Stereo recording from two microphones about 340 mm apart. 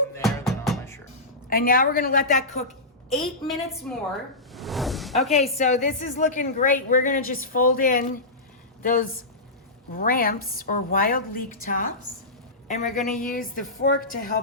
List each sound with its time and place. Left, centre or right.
0.2 s music: centre
1.5 s a woman's voice: left
3.2 s a woman's voice: centre
4.5 s a sound: centre
5.3 s a woman's voice: centre